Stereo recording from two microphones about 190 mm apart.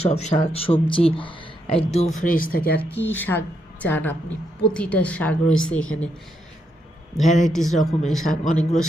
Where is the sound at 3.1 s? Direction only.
10° left (ahead or behind).